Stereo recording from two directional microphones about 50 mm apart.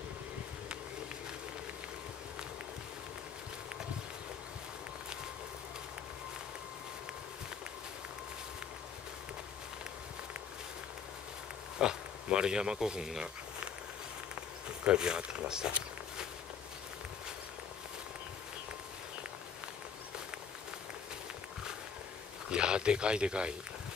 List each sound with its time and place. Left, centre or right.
11.8 s speech: centre
14.3 s a sound: right
22.5 s speech: centre